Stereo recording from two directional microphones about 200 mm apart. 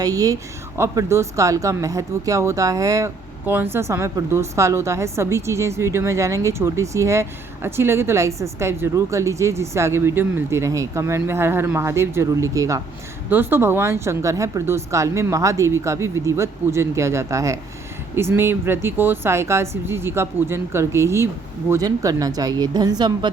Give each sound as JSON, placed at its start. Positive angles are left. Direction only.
{"t": 0.0, "sound": "speech", "side_deg": -20}